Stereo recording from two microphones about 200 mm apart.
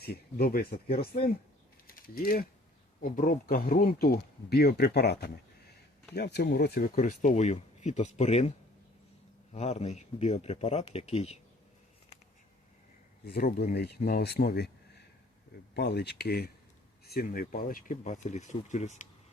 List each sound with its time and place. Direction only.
0.0 s speech: 50° left (ahead or behind)
1.9 s mechanisms: 45° left (ahead or behind)
3.0 s speech: 45° left (ahead or behind)
13.2 s speech: 50° left (ahead or behind)
15.7 s speech: 55° left (ahead or behind); by 19.0 s 35° left (ahead or behind)